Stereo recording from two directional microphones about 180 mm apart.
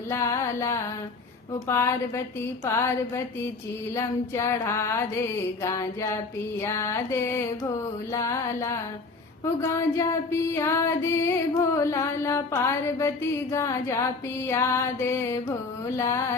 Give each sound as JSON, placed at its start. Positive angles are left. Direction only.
{"t": 0.1, "sound": "music", "side_deg": 15}
{"t": 3.9, "sound": "music", "side_deg": 15}